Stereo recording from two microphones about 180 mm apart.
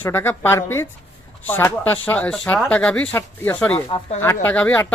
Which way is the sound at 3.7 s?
35° left (ahead or behind).